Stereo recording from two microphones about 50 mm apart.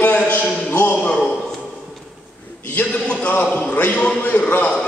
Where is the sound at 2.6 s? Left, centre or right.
Left.